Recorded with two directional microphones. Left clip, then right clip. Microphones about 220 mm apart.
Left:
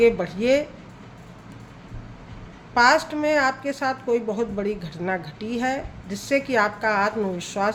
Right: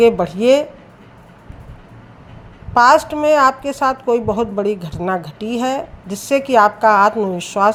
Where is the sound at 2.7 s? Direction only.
30° right (ahead or behind).